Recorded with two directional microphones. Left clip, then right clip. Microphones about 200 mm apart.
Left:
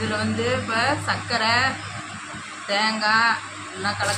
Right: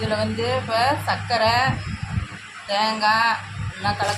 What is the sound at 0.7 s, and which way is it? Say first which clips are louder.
Speech: right 4 dB; 35° right (ahead or behind).